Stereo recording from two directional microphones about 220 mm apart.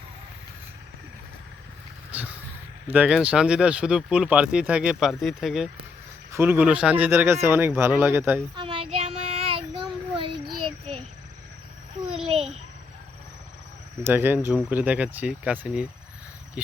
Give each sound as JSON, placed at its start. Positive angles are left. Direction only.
{"t": 2.1, "sound": "a sound", "side_deg": -5}
{"t": 2.8, "sound": "speech", "side_deg": -5}
{"t": 8.5, "sound": "child singing", "side_deg": -25}
{"t": 12.3, "sound": "babbling", "side_deg": -25}
{"t": 14.0, "sound": "speech", "side_deg": -10}